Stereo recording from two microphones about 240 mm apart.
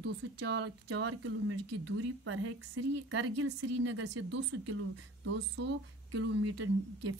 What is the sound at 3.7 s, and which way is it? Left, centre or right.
Speech, right.